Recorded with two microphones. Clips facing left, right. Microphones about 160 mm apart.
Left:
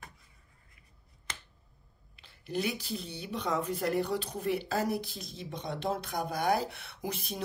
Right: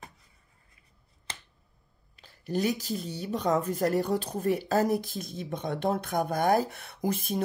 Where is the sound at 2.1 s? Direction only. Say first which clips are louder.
Right 4 dB; 40° right (ahead or behind).